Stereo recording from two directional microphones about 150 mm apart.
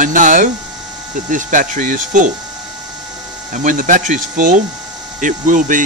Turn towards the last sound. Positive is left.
turn(degrees=-60)  # may be behind; listen again after turning